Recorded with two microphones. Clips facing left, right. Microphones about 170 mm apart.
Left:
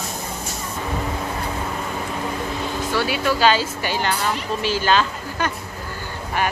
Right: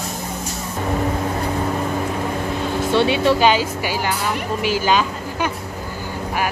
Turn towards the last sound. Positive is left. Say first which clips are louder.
# right 2 dB
turn(degrees=-10)  # may be behind; listen again after turning